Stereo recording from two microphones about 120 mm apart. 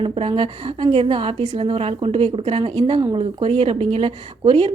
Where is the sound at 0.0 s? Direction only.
50° right (ahead or behind).